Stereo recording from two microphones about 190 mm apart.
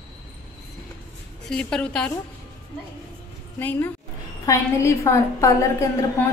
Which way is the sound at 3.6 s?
10° left (ahead or behind).